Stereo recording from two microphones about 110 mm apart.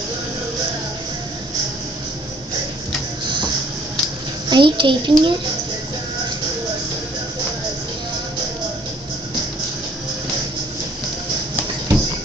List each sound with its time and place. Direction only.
4.5 s a child's voice: 45° right (ahead or behind)